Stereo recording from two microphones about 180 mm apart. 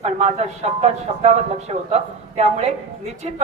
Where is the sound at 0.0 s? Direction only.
35° right (ahead or behind).